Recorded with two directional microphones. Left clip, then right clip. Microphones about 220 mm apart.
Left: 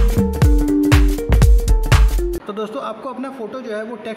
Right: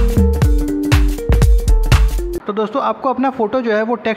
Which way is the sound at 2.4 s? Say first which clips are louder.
Right 8 dB; 15° right (ahead or behind).